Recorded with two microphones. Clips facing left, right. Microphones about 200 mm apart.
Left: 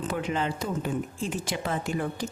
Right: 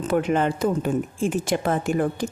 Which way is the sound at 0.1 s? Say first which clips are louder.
Right 10 dB; 55° right (ahead or behind).